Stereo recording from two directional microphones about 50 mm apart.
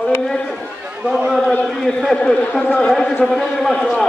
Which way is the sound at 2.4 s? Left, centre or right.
Left.